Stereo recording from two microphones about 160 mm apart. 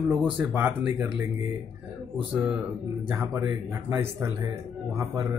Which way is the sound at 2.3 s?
10° right (ahead or behind).